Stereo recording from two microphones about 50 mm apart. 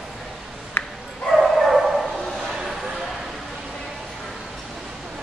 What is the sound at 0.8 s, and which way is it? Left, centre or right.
Dog, left.